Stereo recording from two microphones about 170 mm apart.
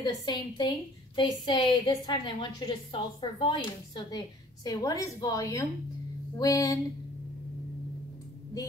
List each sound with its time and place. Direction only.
0.0 s a woman's voice: 25° left (ahead or behind)